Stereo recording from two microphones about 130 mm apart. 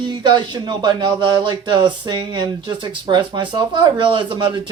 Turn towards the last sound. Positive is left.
turn(degrees=-35)  # may be behind; listen again after turning